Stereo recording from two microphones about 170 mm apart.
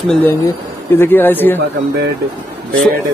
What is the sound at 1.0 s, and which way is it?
Speech, 10° left (ahead or behind).